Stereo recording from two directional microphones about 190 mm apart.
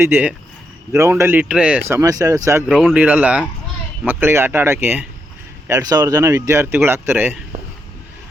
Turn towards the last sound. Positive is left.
turn(degrees=-10)  # may be behind; listen again after turning